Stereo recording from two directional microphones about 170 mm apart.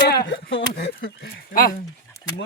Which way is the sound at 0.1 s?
80° left.